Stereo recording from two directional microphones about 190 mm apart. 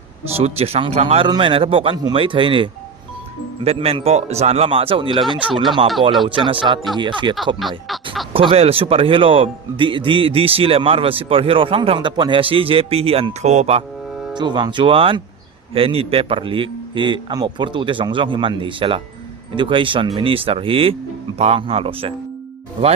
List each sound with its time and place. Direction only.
0.3 s speech: 30° right (ahead or behind)
14.3 s speech: 25° right (ahead or behind)